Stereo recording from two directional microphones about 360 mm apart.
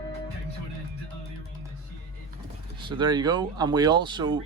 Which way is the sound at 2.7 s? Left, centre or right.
Centre.